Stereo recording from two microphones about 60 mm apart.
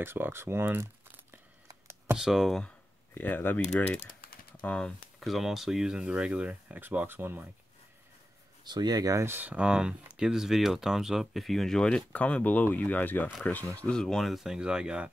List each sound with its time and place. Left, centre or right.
0.0 s speech: right
2.1 s speech: centre
3.2 s speech: left
5.2 s speech: centre
6.7 s speech: right
8.9 s speech: right
9.2 s speech: right
9.6 s speech: centre
12.1 s speech: left
13.7 s speech: centre
14.0 s speech: centre